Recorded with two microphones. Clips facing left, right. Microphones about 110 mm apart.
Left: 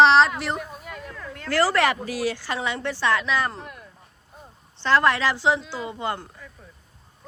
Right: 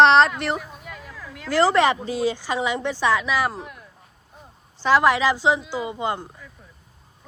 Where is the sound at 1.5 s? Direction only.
20° right (ahead or behind); by 3.9 s 5° right (ahead or behind).